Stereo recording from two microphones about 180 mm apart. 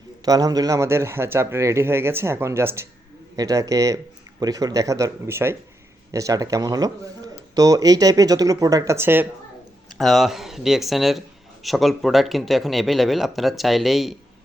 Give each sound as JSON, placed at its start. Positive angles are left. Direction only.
{"t": 0.3, "sound": "speech", "side_deg": -20}
{"t": 9.9, "sound": "a man's voice", "side_deg": 0}